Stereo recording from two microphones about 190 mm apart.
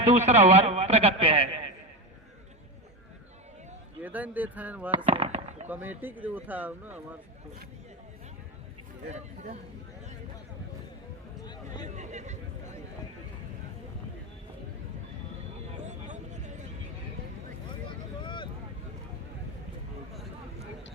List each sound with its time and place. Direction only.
0.0 s a man's voice: 35° right (ahead or behind)
4.0 s speech: 10° right (ahead or behind)
5.1 s fireworks: 30° right (ahead or behind)
5.6 s speech: 10° right (ahead or behind)
9.0 s a man's voice: 40° right (ahead or behind)
11.4 s a sound: 20° left (ahead or behind)
11.9 s a sound: 40° right (ahead or behind)
15.8 s vehicle: 40° right (ahead or behind)
17.8 s vehicle: 25° left (ahead or behind)